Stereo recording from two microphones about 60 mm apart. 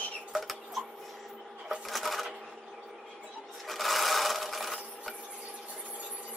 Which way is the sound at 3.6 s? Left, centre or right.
Centre.